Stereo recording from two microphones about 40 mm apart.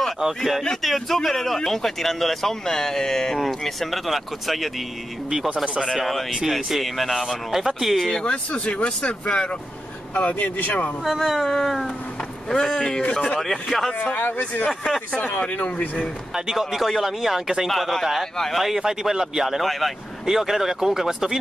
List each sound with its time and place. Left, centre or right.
0.4 s speech: centre
6.0 s speech: centre
8.3 s speech: left
11.1 s speech: centre
12.4 s speech: centre
13.4 s speech: centre
14.1 s speech: left
16.5 s speech: centre
19.6 s speech: centre
20.2 s speech: centre